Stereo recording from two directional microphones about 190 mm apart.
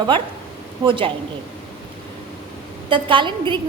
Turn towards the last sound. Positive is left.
turn(degrees=-25)  # may be behind; listen again after turning